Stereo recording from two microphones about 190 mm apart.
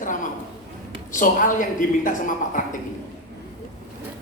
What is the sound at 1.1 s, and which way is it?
A woman's voice, 45° left (ahead or behind).